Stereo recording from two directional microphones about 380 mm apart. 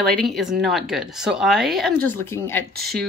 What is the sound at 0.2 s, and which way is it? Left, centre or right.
Speech, centre.